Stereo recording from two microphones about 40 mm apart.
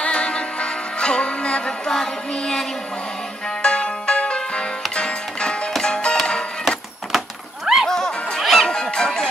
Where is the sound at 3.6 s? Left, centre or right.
Left.